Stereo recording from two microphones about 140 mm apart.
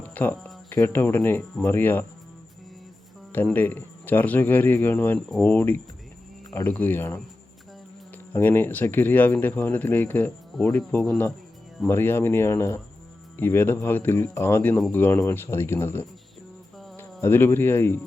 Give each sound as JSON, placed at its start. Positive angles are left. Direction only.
{"t": 0.0, "sound": "speech", "side_deg": 10}
{"t": 3.3, "sound": "speech", "side_deg": 10}
{"t": 8.3, "sound": "speech", "side_deg": 15}